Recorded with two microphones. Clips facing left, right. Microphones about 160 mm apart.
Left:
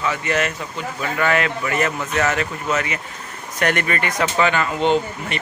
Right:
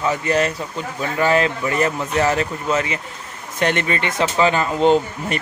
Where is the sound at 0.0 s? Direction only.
35° right (ahead or behind).